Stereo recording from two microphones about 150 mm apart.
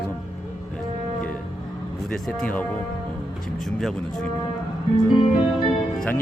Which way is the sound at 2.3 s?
10° left (ahead or behind).